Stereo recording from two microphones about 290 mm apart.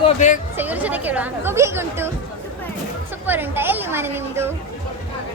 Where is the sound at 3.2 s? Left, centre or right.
Centre.